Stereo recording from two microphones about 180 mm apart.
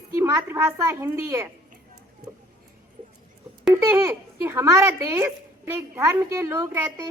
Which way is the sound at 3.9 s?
15° right (ahead or behind).